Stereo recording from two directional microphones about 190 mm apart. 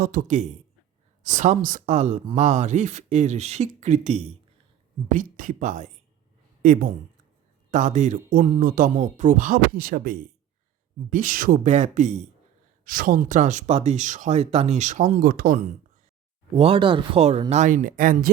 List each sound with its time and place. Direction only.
0.0 s speech: 50° right (ahead or behind)
12.8 s speech: 50° right (ahead or behind)
16.5 s speech: 30° right (ahead or behind); by 18.3 s 45° right (ahead or behind)